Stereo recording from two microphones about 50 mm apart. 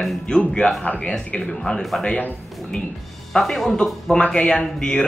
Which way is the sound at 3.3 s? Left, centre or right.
Centre.